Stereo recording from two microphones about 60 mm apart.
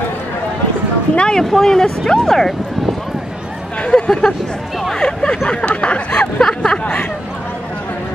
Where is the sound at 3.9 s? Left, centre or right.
Centre.